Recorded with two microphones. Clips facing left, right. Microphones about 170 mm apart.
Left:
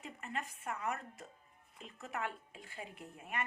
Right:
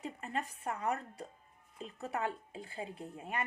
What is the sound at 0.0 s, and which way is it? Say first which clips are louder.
A woman's voice: right 4 dB; 35° right (ahead or behind).